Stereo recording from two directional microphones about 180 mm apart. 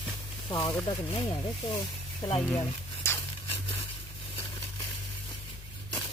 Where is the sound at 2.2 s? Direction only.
20° left (ahead or behind).